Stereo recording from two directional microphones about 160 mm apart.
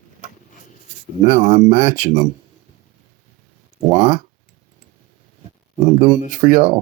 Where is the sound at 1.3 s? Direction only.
30° right (ahead or behind).